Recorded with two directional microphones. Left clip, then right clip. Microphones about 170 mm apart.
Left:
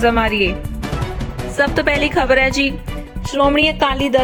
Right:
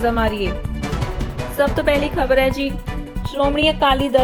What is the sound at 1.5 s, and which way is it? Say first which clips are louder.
A woman's voice: left 1 dB; 15° left (ahead or behind).